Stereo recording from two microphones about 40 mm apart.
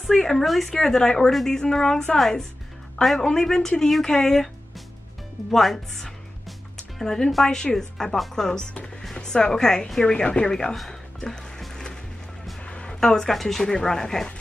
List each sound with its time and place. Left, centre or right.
0.1 s speech: centre
8.7 s music: left
9.1 s speech: centre
10.9 s music: centre
12.6 s music: left
13.0 s speech: centre